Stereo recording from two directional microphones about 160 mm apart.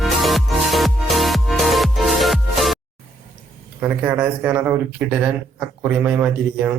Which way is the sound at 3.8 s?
10° right (ahead or behind).